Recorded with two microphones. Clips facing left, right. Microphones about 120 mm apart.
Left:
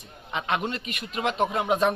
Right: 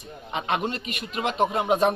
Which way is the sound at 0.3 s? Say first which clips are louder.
Right 1 dB; 35° right (ahead or behind).